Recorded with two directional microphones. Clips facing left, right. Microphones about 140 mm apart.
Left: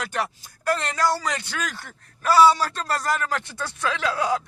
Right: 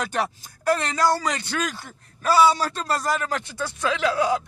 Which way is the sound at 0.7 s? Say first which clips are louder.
Right 2 dB; 15° right (ahead or behind).